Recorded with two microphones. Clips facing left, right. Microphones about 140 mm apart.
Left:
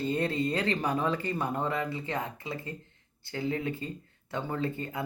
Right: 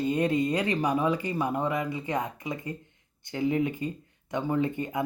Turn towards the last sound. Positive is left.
turn(degrees=-20)  # may be behind; listen again after turning